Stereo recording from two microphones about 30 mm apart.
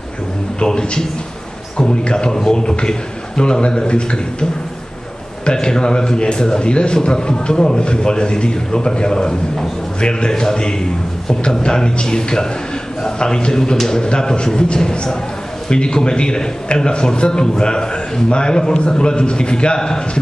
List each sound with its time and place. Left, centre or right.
0.6 s a man's voice: left
2.3 s a man's voice: centre
2.6 s a man's voice: left